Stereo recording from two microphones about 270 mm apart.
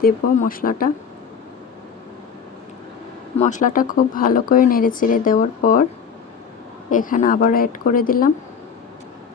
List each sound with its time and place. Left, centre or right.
0.0 s speech: left
3.3 s speech: left
6.9 s speech: left